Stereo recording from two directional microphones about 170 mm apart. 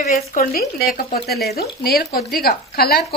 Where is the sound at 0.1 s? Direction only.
55° left (ahead or behind).